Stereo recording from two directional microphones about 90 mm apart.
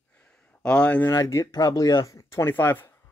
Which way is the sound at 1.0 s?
35° left (ahead or behind).